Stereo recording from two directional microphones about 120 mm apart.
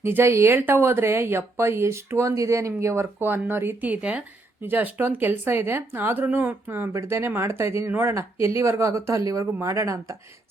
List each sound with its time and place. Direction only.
0.0 s speech: 20° right (ahead or behind)